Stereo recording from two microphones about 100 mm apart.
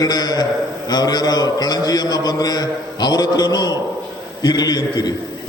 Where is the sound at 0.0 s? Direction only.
40° left (ahead or behind).